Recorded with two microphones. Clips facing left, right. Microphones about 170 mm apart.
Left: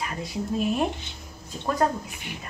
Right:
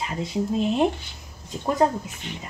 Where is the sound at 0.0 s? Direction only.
25° right (ahead or behind).